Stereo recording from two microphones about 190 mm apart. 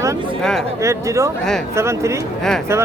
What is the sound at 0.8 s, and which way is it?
Speech, 15° right (ahead or behind).